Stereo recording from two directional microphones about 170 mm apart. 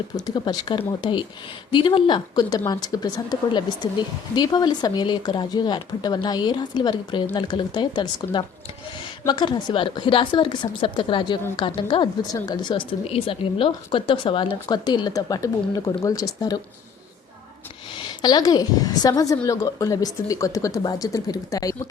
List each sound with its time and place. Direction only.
0.2 s a woman's voice: 25° left (ahead or behind)
18.2 s a woman's voice: 25° left (ahead or behind)